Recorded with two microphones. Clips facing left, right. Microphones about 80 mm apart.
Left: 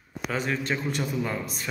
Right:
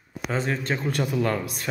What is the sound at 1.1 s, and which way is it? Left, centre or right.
Speech, right.